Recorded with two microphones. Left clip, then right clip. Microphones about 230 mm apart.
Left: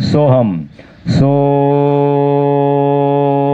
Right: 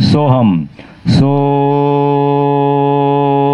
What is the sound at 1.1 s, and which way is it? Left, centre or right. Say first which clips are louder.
Mantra: left 1 dB; right.